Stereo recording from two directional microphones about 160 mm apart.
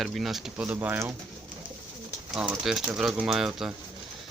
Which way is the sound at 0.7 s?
15° right (ahead or behind).